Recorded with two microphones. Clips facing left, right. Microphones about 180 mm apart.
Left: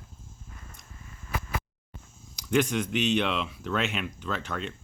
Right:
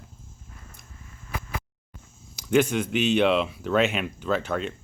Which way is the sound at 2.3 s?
5° right (ahead or behind).